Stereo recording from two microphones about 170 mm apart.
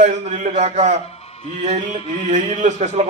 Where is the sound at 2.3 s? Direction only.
40° right (ahead or behind).